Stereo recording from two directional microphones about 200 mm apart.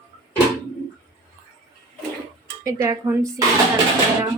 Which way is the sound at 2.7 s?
15° right (ahead or behind).